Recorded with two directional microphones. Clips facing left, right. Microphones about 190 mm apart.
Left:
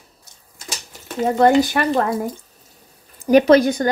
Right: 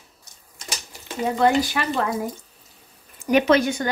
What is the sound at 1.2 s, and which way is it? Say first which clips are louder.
Speech: left 5 dB; 45° left (ahead or behind).